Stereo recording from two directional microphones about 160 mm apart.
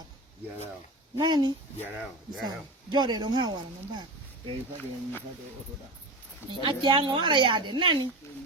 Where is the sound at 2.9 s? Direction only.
25° right (ahead or behind).